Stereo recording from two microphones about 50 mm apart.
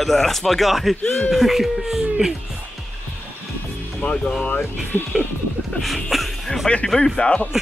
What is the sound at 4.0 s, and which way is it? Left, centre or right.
Speech, centre.